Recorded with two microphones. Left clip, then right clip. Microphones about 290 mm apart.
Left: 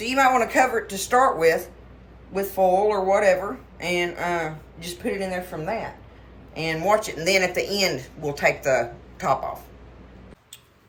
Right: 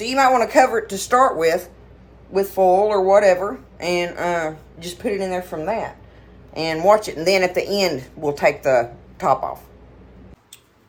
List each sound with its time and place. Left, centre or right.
0.0 s speech: centre